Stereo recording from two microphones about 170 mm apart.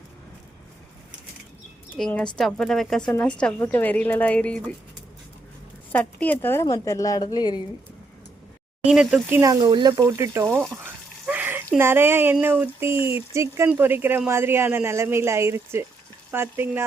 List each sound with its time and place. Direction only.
2.0 s a woman's voice: 5° left (ahead or behind)
5.9 s speech: 10° left (ahead or behind)
8.8 s speech: 5° right (ahead or behind)
9.4 s speech: 20° right (ahead or behind)
10.8 s a sound: 10° right (ahead or behind)
11.8 s speech: 15° right (ahead or behind)